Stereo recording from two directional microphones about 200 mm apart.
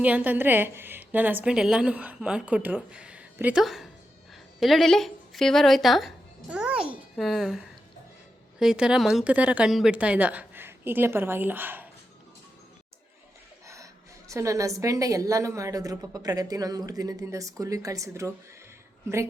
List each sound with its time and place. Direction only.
0.0 s a woman's voice: 10° right (ahead or behind)
14.3 s a woman's voice: 15° right (ahead or behind)